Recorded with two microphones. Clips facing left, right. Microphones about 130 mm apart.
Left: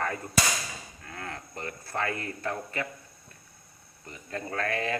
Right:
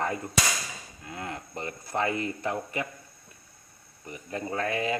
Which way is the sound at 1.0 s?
15° right (ahead or behind).